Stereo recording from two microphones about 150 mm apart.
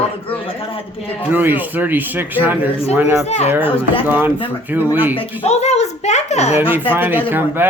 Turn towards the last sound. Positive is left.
turn(degrees=-15)  # may be behind; listen again after turning